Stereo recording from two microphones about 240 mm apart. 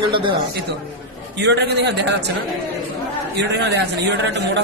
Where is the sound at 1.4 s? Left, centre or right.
Right.